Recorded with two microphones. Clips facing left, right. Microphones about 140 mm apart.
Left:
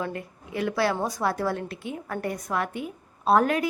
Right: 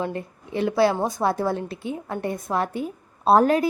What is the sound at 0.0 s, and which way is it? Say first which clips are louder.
A woman's voice: right 4 dB; 30° right (ahead or behind).